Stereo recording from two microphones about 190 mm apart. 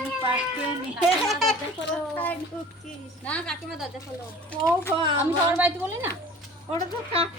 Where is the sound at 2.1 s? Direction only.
10° left (ahead or behind).